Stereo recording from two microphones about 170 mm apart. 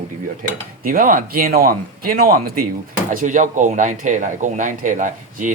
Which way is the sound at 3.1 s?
50° right (ahead or behind).